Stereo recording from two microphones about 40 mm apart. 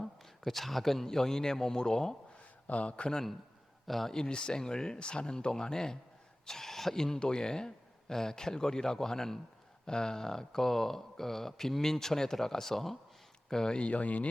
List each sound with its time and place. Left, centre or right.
0.0 s a man's voice: centre
2.6 s speech: left
3.8 s speech: centre
4.1 s speech: left; by 13.0 s centre
13.5 s speech: centre
13.7 s speech: left